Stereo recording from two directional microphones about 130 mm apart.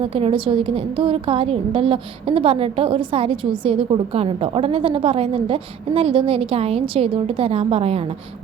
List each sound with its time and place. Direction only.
0.0 s a woman's voice: 45° right (ahead or behind)